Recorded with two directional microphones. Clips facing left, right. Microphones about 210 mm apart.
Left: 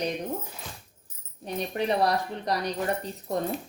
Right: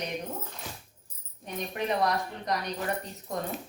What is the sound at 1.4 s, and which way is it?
Speech, 35° left (ahead or behind).